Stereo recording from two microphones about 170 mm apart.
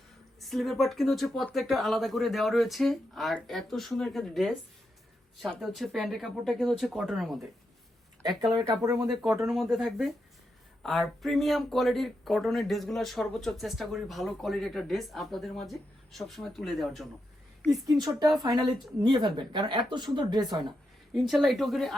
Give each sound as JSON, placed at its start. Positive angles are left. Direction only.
{"t": 0.3, "sound": "speech", "side_deg": 0}
{"t": 8.2, "sound": "speech", "side_deg": -25}
{"t": 9.0, "sound": "speech", "side_deg": -5}
{"t": 17.7, "sound": "speech", "side_deg": -20}
{"t": 21.1, "sound": "speech", "side_deg": 0}